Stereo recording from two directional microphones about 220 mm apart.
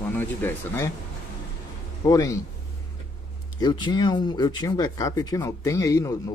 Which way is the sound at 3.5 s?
20° left (ahead or behind).